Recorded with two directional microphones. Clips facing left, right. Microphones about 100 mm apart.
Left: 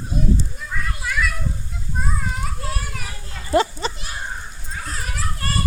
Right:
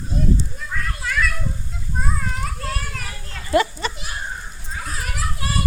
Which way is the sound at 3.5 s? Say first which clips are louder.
Even; 25° left (ahead or behind).